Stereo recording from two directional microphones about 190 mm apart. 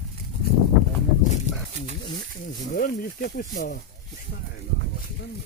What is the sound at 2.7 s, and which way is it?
Speech, 50° left (ahead or behind).